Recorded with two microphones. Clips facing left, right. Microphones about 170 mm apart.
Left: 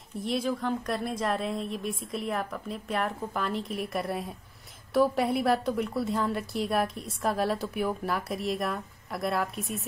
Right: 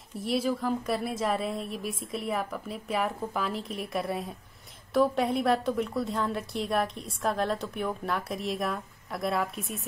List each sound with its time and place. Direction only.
0.2 s a woman's voice: centre (ahead or behind)